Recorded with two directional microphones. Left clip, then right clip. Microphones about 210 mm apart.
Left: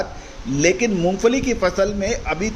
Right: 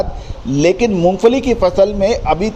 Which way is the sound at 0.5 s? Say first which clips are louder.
Right 5 dB; 25° right (ahead or behind).